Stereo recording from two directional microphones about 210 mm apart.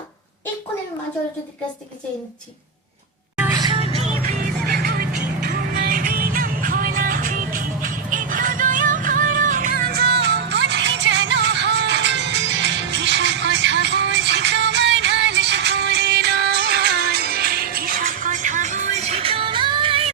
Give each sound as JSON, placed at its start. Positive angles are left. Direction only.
{"t": 3.6, "sound": "music", "side_deg": -25}
{"t": 4.6, "sound": "music", "side_deg": -50}